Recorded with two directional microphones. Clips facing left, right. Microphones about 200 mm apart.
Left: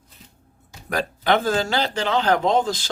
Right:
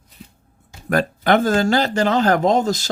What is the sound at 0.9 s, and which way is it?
Speech, 50° right (ahead or behind).